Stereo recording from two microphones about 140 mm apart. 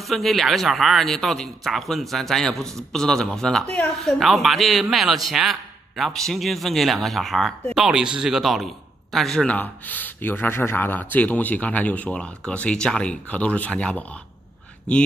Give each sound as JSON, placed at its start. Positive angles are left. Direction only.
{"t": 0.0, "sound": "speech", "side_deg": 0}